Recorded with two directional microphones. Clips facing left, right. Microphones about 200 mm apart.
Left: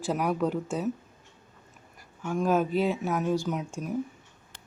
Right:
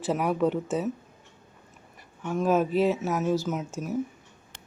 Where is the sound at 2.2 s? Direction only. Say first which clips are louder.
Right 1 dB; centre (ahead or behind).